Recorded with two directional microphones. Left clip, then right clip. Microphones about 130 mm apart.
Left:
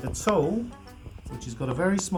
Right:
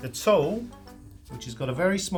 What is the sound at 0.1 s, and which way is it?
Speech, 60° right (ahead or behind).